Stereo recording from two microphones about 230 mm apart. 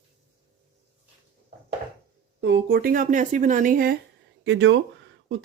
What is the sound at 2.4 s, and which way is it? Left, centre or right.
Speech, right.